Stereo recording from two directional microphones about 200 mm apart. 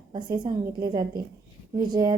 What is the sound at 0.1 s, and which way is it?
A woman's voice, 20° right (ahead or behind).